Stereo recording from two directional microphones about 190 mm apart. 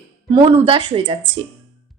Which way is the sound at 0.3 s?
30° right (ahead or behind).